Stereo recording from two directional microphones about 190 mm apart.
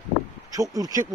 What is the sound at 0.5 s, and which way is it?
Speech, 20° right (ahead or behind).